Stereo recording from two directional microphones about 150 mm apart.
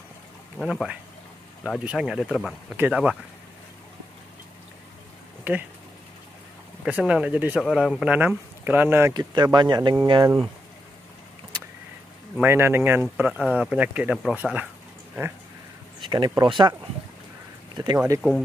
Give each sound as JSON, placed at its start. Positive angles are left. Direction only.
{"t": 0.6, "sound": "speech", "side_deg": -5}
{"t": 5.4, "sound": "speech", "side_deg": -10}
{"t": 6.8, "sound": "speech", "side_deg": -5}
{"t": 9.1, "sound": "speech", "side_deg": -30}
{"t": 12.4, "sound": "speech", "side_deg": -15}
{"t": 16.0, "sound": "speech", "side_deg": -30}
{"t": 17.9, "sound": "speech", "side_deg": -20}